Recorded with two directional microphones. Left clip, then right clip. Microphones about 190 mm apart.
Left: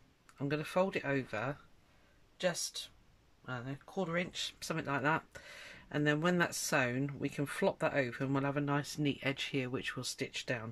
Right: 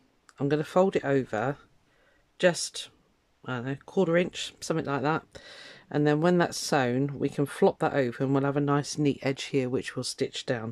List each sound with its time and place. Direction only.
0.4 s speech: 35° right (ahead or behind)
2.3 s speech: 50° right (ahead or behind); by 10.7 s 30° right (ahead or behind)